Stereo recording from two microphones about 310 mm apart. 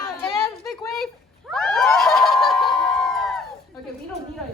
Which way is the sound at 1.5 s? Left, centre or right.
Centre.